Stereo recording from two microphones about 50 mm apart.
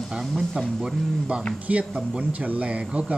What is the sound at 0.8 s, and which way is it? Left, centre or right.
A man's voice, centre.